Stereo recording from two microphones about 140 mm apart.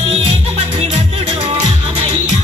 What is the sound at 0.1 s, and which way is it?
Music, 45° right (ahead or behind).